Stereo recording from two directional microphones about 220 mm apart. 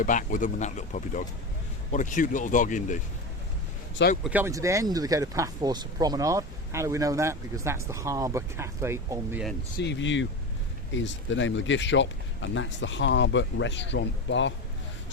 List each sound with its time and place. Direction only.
0.0 s speech: 35° left (ahead or behind)
4.2 s speech: 5° right (ahead or behind)
9.8 s speech: 55° left (ahead or behind)